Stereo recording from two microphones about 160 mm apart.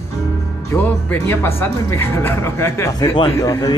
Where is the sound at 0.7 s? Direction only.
10° left (ahead or behind).